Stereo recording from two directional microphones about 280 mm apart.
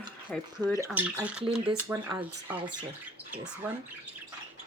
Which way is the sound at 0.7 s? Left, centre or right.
Centre.